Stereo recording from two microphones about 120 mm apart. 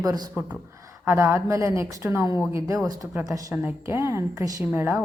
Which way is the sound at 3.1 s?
15° right (ahead or behind).